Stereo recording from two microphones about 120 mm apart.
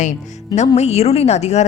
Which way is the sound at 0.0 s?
80° left.